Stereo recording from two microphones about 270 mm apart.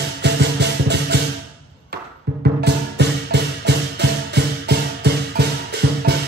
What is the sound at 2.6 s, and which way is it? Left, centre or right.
Music, right.